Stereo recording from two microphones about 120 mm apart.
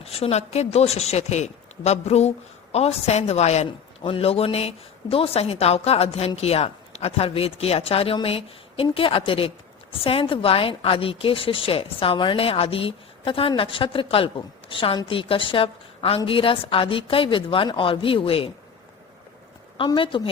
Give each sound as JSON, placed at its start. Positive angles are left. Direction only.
{"t": 0.0, "sound": "speech", "side_deg": 55}
{"t": 3.7, "sound": "a woman's voice", "side_deg": 50}
{"t": 19.7, "sound": "a woman's voice", "side_deg": 45}